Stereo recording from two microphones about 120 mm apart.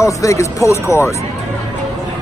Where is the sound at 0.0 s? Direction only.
25° left (ahead or behind).